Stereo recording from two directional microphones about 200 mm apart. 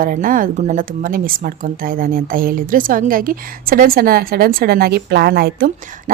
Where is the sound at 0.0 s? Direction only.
45° right (ahead or behind).